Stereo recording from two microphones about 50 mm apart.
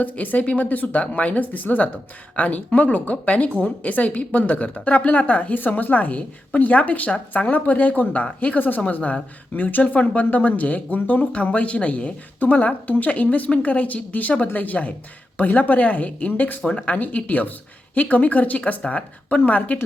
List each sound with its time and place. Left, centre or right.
0.0 s a woman's voice: left